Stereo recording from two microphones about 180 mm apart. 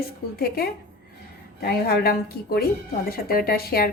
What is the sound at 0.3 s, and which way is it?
Speech, 55° left (ahead or behind).